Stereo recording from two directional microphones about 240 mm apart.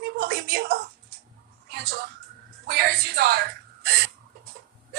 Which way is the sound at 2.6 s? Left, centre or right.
Right.